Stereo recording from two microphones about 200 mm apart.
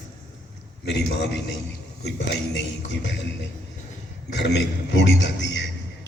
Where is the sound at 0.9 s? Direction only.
60° left (ahead or behind).